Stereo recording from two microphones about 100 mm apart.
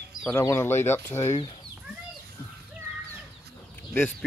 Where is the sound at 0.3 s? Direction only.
30° left (ahead or behind).